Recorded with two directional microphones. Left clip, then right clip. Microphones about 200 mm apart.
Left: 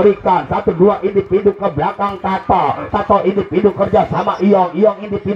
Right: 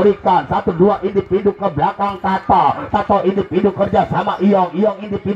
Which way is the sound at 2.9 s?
15° right (ahead or behind).